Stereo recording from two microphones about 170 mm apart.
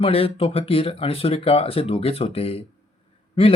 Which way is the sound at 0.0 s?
35° left (ahead or behind).